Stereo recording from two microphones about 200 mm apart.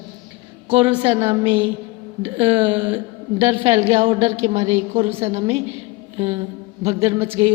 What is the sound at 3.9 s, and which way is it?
A woman's voice, 35° right (ahead or behind).